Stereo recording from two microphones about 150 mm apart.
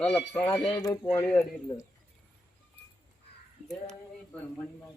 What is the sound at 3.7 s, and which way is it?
Speech, 5° left (ahead or behind).